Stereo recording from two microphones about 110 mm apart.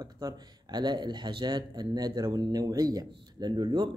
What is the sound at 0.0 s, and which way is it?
Speech, 40° right (ahead or behind).